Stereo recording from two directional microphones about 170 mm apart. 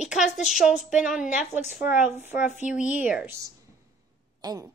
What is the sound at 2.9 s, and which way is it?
A woman's voice, 10° right (ahead or behind).